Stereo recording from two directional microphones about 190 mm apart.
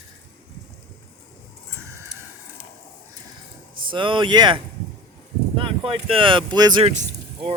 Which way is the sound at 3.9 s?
25° right (ahead or behind).